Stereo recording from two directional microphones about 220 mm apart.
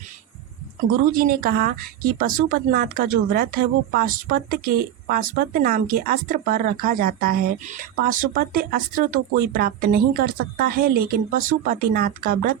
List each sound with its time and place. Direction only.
1.1 s speech: 40° right (ahead or behind)